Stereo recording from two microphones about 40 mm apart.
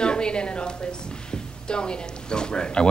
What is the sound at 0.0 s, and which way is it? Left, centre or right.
A woman's voice, left.